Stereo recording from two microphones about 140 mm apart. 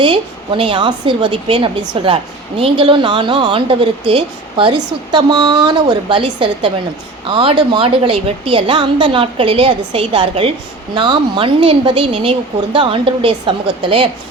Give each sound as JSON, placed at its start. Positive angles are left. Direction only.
{"t": 0.0, "sound": "a woman's voice", "side_deg": -35}